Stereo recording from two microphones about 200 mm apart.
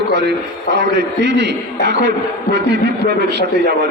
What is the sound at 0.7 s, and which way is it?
Speech, 60° right (ahead or behind).